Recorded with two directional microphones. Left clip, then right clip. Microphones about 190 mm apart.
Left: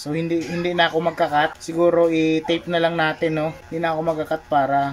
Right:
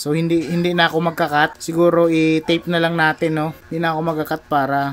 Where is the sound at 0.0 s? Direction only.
45° right (ahead or behind).